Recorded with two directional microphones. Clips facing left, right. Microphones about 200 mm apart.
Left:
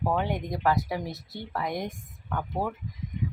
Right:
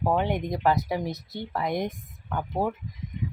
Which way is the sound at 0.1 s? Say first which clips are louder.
Right 4 dB; 20° right (ahead or behind).